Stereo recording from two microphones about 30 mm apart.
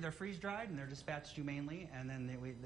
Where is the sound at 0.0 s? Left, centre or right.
Centre.